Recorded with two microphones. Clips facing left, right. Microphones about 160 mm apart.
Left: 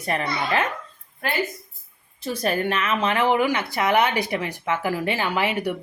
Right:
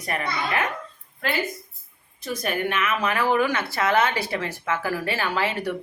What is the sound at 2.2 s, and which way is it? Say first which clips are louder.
Speech: left 3 dB; 35° left (ahead or behind).